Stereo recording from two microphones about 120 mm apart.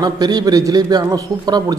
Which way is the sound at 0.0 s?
35° right (ahead or behind).